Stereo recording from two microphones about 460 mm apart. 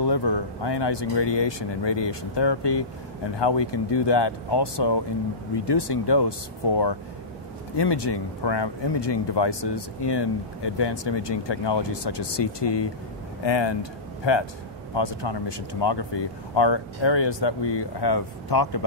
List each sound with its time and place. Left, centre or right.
0.0 s speech: left